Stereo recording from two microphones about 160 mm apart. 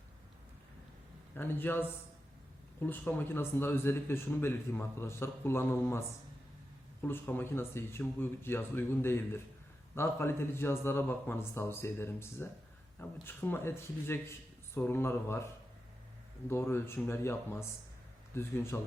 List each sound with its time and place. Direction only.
1.4 s speech: 15° left (ahead or behind)
16.5 s speech: 15° left (ahead or behind)